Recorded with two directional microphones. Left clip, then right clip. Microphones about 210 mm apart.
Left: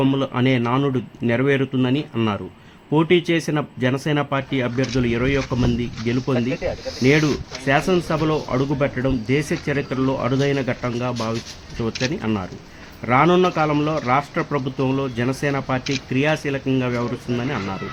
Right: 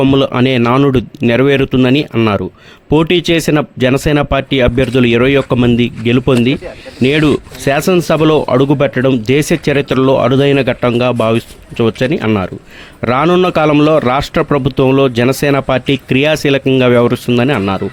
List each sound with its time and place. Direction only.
0.0 s a man's voice: 40° right (ahead or behind)